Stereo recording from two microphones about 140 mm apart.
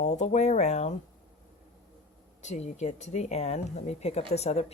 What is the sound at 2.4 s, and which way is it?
Speech, 55° left (ahead or behind).